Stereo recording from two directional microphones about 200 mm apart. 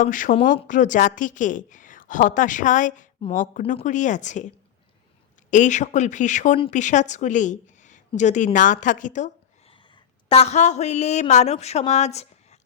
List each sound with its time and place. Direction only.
0.0 s a woman's voice: 40° left (ahead or behind)
5.5 s a woman's voice: 40° left (ahead or behind)
9.7 s speech: 25° left (ahead or behind)